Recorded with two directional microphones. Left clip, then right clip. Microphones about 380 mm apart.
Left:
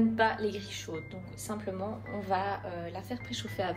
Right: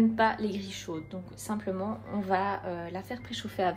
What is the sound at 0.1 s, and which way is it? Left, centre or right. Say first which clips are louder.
Speech: right 1 dB; centre.